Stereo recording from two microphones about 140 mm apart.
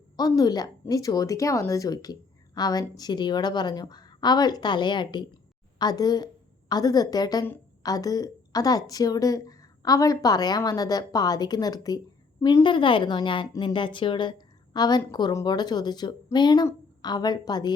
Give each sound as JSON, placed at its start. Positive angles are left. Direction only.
{"t": 0.2, "sound": "a woman's voice", "side_deg": 30}